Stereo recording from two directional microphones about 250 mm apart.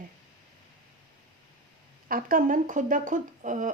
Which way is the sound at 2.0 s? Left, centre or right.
Right.